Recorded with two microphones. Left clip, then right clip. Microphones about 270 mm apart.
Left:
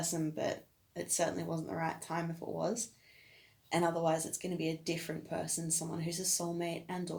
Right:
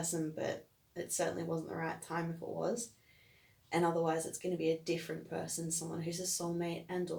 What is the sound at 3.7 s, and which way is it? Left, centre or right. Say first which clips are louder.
Speech: left 1 dB; left.